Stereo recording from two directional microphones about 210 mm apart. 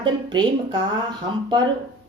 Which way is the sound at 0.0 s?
20° right (ahead or behind).